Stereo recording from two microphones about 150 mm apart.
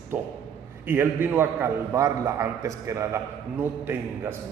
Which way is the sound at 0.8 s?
15° right (ahead or behind).